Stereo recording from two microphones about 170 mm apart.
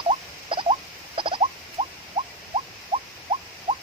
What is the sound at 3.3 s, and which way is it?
Rodents, 30° right (ahead or behind).